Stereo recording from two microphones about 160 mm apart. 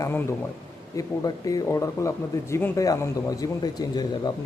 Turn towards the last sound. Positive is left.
turn(degrees=25)  # may be behind; listen again after turning